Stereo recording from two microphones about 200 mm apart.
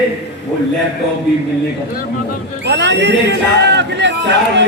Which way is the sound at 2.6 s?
60° right (ahead or behind).